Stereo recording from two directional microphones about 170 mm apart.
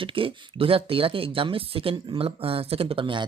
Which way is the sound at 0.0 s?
30° right (ahead or behind).